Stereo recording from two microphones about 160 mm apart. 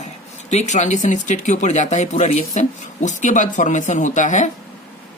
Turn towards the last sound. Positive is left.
turn(degrees=50)  # may be behind; listen again after turning